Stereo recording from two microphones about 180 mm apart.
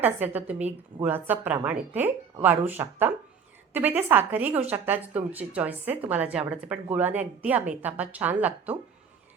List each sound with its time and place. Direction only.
0.0 s a woman's voice: 10° right (ahead or behind)